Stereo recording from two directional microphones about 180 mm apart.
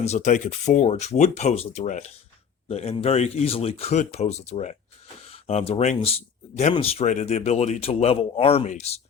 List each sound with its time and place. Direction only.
0.0 s speech: 40° left (ahead or behind)